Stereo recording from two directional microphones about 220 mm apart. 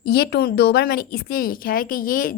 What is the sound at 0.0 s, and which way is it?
A woman's voice, 45° left (ahead or behind).